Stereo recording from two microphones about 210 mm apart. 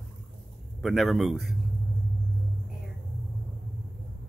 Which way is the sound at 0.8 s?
Centre (ahead or behind).